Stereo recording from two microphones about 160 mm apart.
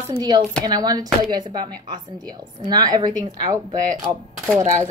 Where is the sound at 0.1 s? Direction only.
25° right (ahead or behind).